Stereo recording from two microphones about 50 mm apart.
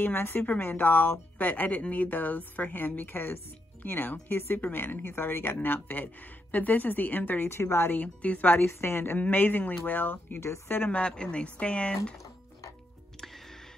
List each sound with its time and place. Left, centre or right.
0.0 s a woman's voice: left
7.4 s a woman's voice: left
7.9 s a woman's voice: left
8.6 s a woman's voice: left
10.4 s a woman's voice: left
10.8 s speech: left